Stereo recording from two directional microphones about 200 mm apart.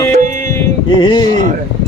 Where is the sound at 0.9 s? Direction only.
20° left (ahead or behind).